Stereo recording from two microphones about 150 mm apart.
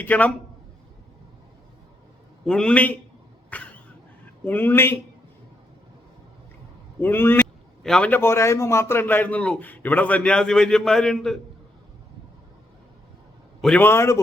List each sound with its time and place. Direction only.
0.0 s a man's voice: 10° left (ahead or behind)
2.5 s a man's voice: 5° left (ahead or behind)
3.5 s a sound: 10° left (ahead or behind)
4.4 s a man's voice: 15° left (ahead or behind)
7.0 s a man's voice: 15° left (ahead or behind)
13.6 s a man's voice: 5° left (ahead or behind)
13.8 s a man's voice: 15° left (ahead or behind)